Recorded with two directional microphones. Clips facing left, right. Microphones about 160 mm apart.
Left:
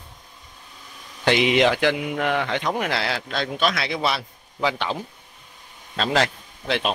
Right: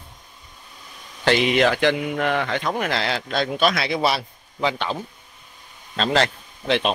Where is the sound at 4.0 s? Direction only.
40° right (ahead or behind).